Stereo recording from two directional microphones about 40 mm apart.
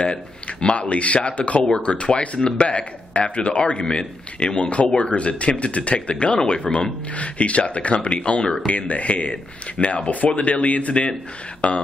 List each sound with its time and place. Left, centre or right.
0.0 s speech: left
0.7 s speech: left